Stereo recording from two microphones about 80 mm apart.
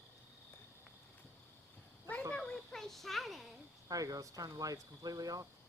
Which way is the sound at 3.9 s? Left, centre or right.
Right.